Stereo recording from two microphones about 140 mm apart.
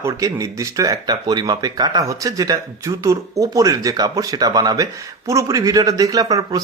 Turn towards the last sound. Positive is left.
turn(degrees=-25)  # may be behind; listen again after turning